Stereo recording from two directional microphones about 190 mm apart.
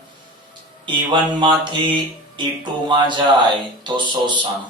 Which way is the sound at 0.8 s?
25° right (ahead or behind).